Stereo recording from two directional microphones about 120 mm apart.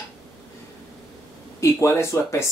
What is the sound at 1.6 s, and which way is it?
Speech, 25° left (ahead or behind).